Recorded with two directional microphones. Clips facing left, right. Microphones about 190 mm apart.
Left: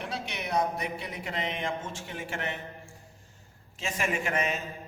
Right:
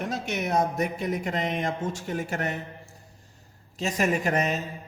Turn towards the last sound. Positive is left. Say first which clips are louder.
# right 5 dB
turn(degrees=-40)  # may be behind; listen again after turning